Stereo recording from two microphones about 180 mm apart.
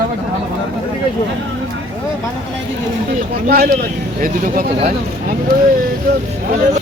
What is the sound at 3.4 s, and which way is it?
Speech, 60° right (ahead or behind).